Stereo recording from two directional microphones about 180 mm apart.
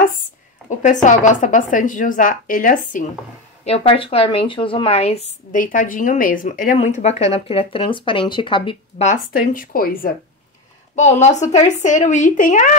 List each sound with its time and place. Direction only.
1.0 s a woman's voice: 45° left (ahead or behind)
3.6 s speech: 35° left (ahead or behind)
5.6 s speech: 50° left (ahead or behind); by 9.0 s 30° left (ahead or behind)
9.0 s a woman's voice: 50° left (ahead or behind)
11.0 s speech: 40° left (ahead or behind)